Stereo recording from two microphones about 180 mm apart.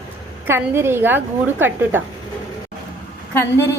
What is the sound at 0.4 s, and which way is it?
A woman's voice, 10° right (ahead or behind).